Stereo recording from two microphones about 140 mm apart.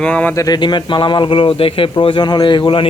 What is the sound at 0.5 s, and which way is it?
Speech, 35° left (ahead or behind).